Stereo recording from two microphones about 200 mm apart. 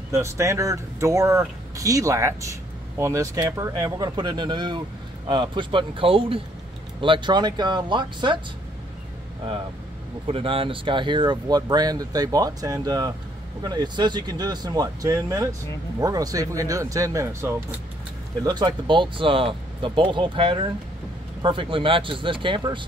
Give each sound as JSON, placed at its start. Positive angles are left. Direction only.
{"t": 0.1, "sound": "speech", "side_deg": -15}
{"t": 10.2, "sound": "speech", "side_deg": -25}